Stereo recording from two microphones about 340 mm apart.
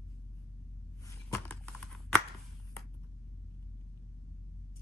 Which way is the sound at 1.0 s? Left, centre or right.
Centre.